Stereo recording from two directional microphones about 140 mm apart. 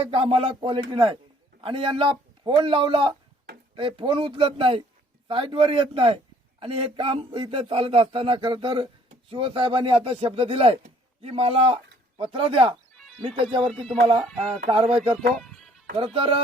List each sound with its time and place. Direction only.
0.0 s speech: 40° right (ahead or behind)
14.2 s speech: 5° left (ahead or behind)
14.7 s speech: 40° right (ahead or behind)
15.4 s music: centre (ahead or behind)
16.0 s speech: 40° right (ahead or behind)